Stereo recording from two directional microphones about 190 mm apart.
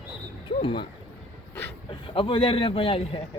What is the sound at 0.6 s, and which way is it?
Speech, 25° left (ahead or behind).